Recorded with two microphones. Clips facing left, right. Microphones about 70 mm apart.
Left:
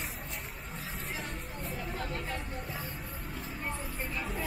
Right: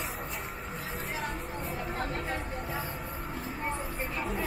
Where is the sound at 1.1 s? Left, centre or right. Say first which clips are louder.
Right 5 dB; right.